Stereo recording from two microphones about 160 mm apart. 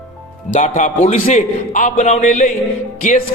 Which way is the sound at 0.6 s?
50° left (ahead or behind).